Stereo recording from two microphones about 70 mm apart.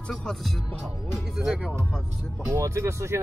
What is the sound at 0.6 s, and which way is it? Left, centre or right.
Speech, centre.